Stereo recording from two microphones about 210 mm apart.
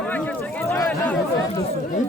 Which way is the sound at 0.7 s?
10° left (ahead or behind).